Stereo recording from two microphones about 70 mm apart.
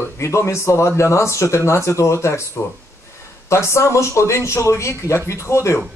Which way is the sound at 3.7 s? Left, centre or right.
Left.